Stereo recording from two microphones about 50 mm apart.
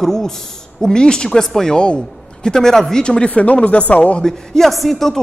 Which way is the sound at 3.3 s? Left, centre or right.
Left.